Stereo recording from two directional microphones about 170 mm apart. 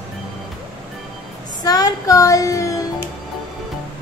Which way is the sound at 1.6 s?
20° left (ahead or behind).